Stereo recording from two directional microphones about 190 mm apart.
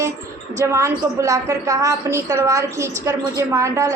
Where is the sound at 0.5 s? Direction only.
15° right (ahead or behind).